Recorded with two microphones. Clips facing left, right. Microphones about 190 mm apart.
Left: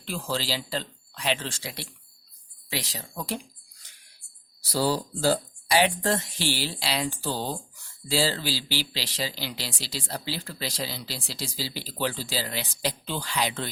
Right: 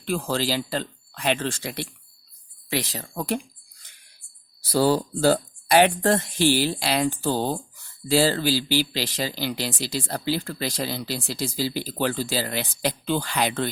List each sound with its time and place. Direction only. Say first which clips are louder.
0.0 s speech: right 6 dB; 55° right (ahead or behind)
4.6 s speech: right 5 dB; 55° right (ahead or behind)